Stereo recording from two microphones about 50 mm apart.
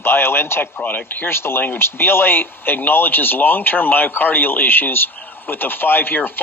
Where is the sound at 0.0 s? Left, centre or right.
Left.